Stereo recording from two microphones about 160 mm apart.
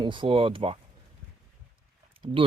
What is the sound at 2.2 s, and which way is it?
Speech, 30° right (ahead or behind).